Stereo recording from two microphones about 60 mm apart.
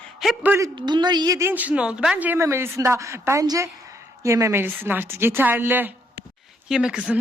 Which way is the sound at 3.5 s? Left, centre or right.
Right.